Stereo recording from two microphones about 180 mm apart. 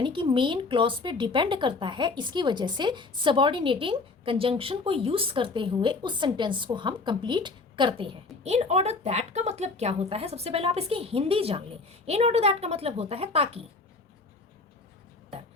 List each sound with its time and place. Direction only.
0.0 s a woman's voice: 25° right (ahead or behind)